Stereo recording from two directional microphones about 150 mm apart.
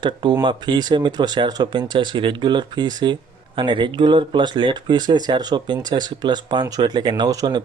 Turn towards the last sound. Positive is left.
turn(degrees=-25)  # may be behind; listen again after turning